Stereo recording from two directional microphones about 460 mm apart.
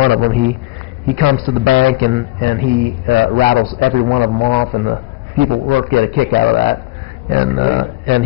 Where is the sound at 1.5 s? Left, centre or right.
Right.